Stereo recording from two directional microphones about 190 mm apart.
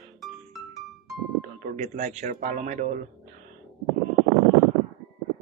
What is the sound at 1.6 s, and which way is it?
Speech, 40° right (ahead or behind).